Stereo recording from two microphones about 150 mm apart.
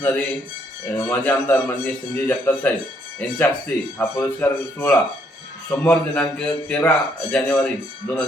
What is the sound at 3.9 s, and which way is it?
A man's voice, 15° left (ahead or behind).